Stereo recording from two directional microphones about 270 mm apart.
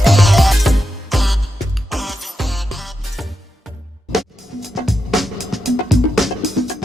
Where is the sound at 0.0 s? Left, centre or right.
Centre.